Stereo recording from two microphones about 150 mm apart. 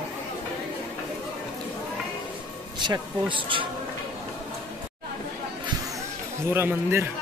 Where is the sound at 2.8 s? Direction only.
30° right (ahead or behind).